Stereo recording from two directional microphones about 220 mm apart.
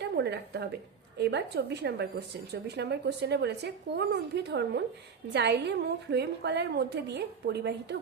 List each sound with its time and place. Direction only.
0.0 s a woman's voice: 50° right (ahead or behind)